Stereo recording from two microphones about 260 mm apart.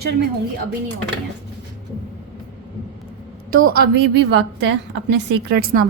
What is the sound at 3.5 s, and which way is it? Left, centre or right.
A woman's voice, right.